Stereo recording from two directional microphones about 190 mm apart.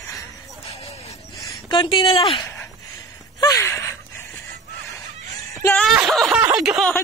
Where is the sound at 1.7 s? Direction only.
25° left (ahead or behind).